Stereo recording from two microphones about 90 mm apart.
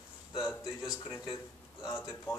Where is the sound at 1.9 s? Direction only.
30° left (ahead or behind).